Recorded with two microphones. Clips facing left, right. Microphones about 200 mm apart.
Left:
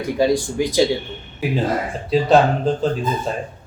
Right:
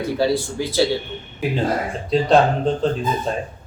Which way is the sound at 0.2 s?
15° left (ahead or behind).